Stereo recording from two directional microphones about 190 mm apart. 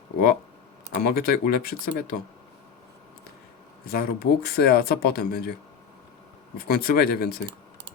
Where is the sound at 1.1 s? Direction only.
50° left (ahead or behind).